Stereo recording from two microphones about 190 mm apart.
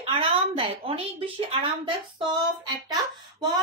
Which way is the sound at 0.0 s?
30° right (ahead or behind).